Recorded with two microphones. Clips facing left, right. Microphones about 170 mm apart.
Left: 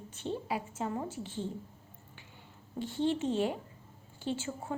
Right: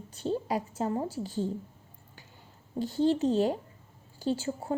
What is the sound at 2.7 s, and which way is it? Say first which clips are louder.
A woman's voice: right 5 dB; 40° right (ahead or behind).